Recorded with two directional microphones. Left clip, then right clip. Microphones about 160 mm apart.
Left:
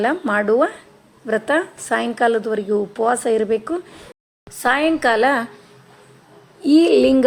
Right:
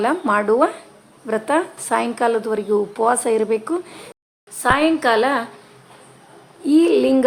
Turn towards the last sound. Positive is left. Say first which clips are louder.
# left 2 dB
turn(degrees=30)  # may be behind; listen again after turning